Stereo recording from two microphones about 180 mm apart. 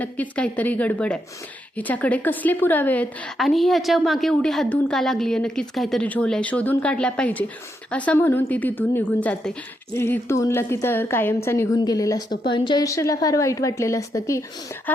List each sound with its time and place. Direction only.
0.0 s a woman's voice: 5° left (ahead or behind)